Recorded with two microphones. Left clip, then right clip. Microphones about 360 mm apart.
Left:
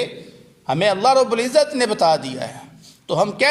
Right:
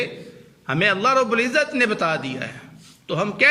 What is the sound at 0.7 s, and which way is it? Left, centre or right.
A man's voice, centre.